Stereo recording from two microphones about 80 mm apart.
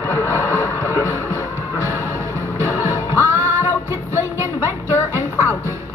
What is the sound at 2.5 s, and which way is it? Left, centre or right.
Music, left.